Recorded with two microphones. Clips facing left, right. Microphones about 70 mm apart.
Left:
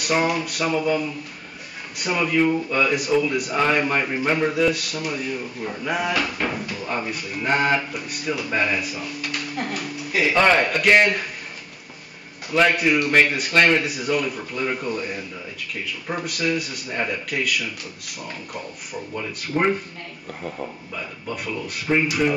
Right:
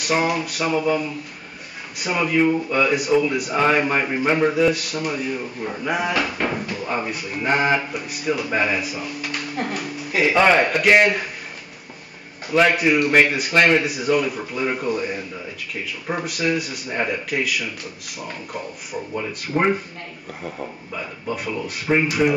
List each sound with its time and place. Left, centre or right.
0.0 s a man's voice: centre
12.4 s a man's voice: centre